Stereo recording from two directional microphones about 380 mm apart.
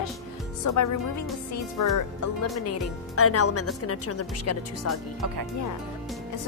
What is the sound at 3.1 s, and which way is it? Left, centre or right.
Speech, left.